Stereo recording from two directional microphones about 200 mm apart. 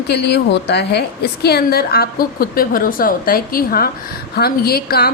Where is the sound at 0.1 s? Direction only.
55° left (ahead or behind).